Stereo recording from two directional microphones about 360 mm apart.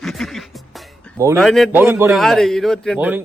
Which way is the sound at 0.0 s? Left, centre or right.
Centre.